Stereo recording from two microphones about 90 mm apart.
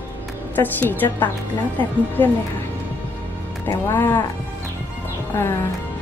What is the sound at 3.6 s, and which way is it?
Speech, 30° left (ahead or behind).